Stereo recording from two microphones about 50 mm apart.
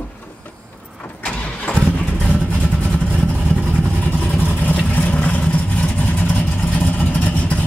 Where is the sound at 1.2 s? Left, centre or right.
Centre.